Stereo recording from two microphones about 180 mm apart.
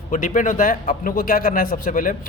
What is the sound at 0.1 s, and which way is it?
A man's voice, 45° left (ahead or behind).